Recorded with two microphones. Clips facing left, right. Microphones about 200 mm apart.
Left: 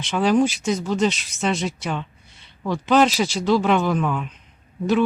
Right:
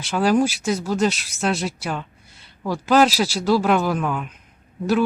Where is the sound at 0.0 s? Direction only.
5° right (ahead or behind).